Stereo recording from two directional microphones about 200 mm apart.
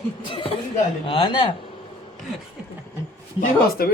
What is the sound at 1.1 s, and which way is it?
Speech, 25° left (ahead or behind).